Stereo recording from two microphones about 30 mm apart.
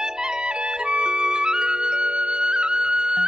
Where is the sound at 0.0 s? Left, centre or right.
Right.